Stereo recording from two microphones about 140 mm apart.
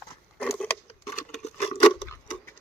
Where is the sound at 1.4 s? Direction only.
40° left (ahead or behind).